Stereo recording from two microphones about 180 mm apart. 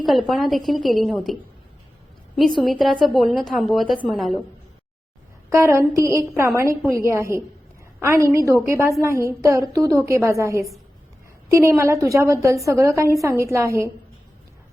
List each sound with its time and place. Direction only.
0.0 s a woman's voice: centre (ahead or behind)
5.5 s a woman's voice: 15° right (ahead or behind)
11.8 s a woman's voice: 15° right (ahead or behind)